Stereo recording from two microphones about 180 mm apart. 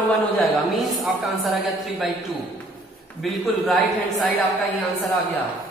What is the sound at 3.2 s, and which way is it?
Speech, centre (ahead or behind).